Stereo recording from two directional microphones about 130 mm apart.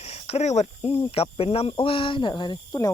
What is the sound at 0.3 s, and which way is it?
Speech, 60° left (ahead or behind).